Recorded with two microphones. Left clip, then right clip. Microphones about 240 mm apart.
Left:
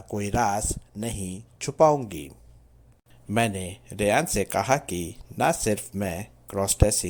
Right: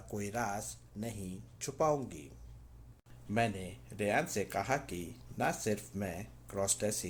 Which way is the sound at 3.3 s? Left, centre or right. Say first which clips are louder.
Left 8 dB; left.